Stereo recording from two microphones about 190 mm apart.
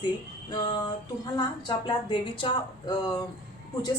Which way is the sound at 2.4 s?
25° left (ahead or behind).